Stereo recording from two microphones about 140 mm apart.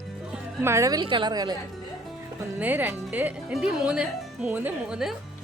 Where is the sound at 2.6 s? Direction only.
15° right (ahead or behind).